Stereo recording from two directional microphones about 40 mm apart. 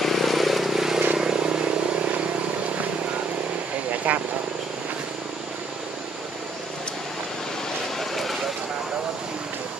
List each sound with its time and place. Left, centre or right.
0.0 s vehicle: centre; by 1.7 s right
3.9 s helicopter: right
8.0 s a sound: centre